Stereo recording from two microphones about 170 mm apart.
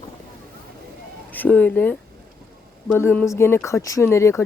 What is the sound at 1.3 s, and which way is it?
Speech, 10° left (ahead or behind).